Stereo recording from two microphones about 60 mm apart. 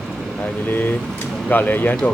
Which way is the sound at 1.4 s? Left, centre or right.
Left.